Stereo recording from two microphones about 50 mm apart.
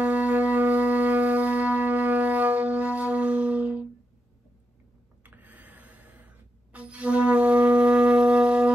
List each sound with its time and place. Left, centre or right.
0.0 s shofar: right
5.2 s music: right